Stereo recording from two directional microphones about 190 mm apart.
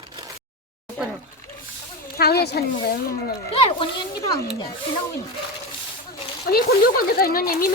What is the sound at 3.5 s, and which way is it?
Speech, 25° left (ahead or behind).